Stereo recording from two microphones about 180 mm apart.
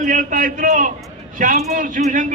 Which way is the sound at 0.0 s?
45° right (ahead or behind).